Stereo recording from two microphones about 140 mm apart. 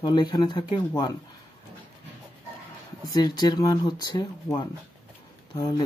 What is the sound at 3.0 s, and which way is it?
Speech, 30° left (ahead or behind).